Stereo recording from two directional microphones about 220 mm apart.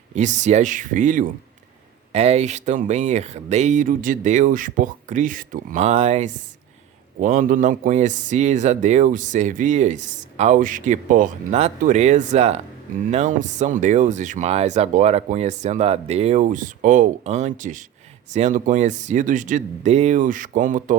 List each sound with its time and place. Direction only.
0.1 s a man's voice: 35° right (ahead or behind)